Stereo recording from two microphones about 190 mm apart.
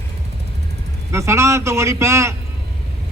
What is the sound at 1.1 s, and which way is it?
A man's voice, 15° right (ahead or behind).